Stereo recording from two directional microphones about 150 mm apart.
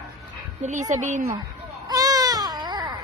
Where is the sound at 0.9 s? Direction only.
55° right (ahead or behind).